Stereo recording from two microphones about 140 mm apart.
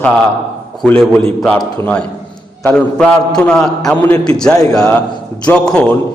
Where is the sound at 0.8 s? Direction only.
5° left (ahead or behind).